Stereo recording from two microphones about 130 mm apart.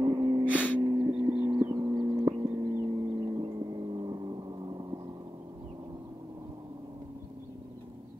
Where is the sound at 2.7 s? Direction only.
25° right (ahead or behind).